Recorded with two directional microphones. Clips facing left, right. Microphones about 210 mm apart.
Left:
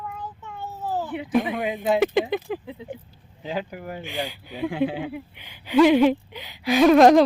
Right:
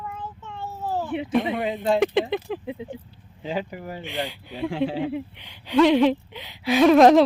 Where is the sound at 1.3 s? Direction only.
Centre (ahead or behind).